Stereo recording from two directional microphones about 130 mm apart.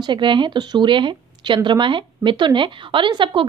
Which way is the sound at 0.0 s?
35° right (ahead or behind).